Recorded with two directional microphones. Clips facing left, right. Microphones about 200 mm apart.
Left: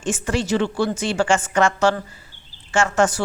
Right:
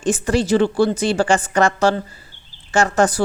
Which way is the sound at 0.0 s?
35° right (ahead or behind).